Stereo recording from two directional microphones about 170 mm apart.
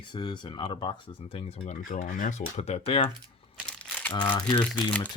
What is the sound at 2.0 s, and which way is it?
Speech, 50° left (ahead or behind).